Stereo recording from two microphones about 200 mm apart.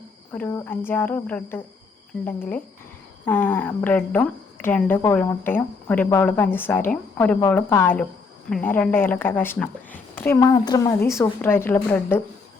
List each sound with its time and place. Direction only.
0.3 s a woman's voice: 10° left (ahead or behind)
3.2 s a woman's voice: 10° left (ahead or behind)
10.4 s a woman's voice: 20° left (ahead or behind)